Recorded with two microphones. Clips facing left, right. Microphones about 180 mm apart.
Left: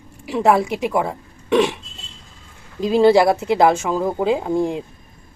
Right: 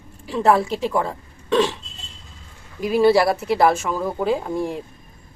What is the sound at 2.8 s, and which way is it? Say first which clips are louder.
A woman's voice: left 3 dB; 20° left (ahead or behind).